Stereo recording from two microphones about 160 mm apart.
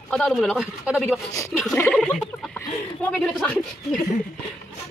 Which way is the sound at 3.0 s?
5° left (ahead or behind).